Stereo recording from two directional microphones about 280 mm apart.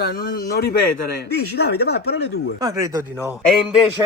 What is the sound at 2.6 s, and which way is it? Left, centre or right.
Speech, centre.